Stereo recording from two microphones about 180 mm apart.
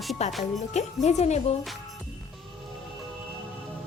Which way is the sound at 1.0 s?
40° left (ahead or behind).